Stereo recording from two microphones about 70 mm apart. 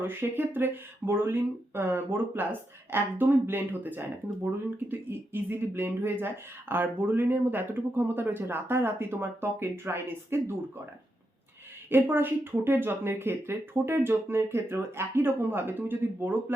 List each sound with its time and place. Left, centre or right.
0.0 s speech: right
11.9 s speech: right